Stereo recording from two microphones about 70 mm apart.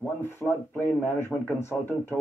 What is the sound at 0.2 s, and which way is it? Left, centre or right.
Speech, left.